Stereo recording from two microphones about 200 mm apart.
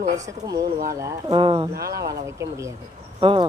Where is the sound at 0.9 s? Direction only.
15° right (ahead or behind).